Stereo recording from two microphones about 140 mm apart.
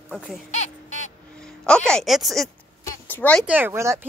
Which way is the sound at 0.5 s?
55° left (ahead or behind).